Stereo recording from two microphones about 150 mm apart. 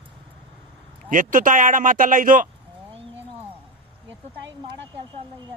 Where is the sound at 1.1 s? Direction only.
65° right (ahead or behind).